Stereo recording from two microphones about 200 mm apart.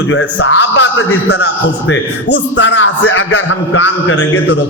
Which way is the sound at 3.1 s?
75° left (ahead or behind).